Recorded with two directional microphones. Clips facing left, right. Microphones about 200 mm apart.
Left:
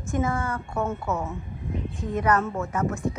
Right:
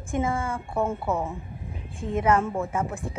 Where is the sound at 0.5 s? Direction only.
30° right (ahead or behind).